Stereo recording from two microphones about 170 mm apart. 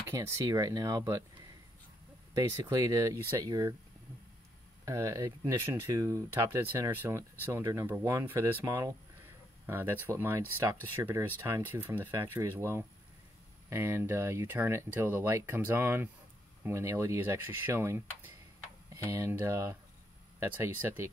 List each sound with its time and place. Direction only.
0.1 s speech: 20° right (ahead or behind)
2.3 s speech: 20° right (ahead or behind)
4.8 s speech: 20° right (ahead or behind)